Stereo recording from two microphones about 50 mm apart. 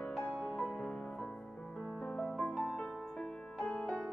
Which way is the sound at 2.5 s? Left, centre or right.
Centre.